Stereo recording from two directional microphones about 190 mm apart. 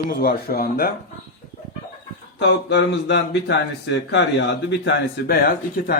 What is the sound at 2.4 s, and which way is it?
Speech, 65° left (ahead or behind).